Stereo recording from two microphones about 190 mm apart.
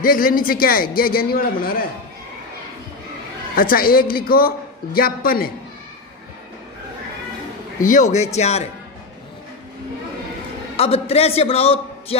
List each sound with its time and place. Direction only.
0.0 s a man's voice: 50° left (ahead or behind)
3.5 s a man's voice: 50° left (ahead or behind)
7.8 s a man's voice: 40° left (ahead or behind)
10.8 s a man's voice: 30° left (ahead or behind)